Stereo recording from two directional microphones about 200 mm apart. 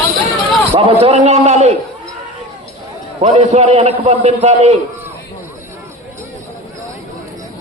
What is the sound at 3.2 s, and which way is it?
A man's voice, 35° right (ahead or behind).